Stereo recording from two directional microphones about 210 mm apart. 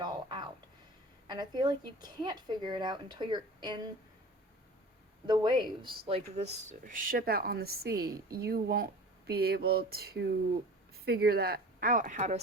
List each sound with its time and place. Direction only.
0.0 s a sound: 20° right (ahead or behind)
1.3 s speech: 20° right (ahead or behind)
5.2 s speech: 20° right (ahead or behind)